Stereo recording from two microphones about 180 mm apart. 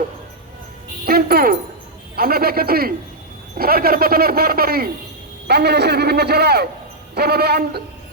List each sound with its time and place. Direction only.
1.0 s speech: 60° right (ahead or behind)